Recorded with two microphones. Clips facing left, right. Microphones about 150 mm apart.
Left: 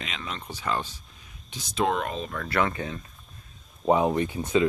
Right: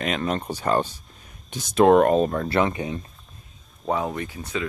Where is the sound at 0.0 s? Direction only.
50° right (ahead or behind).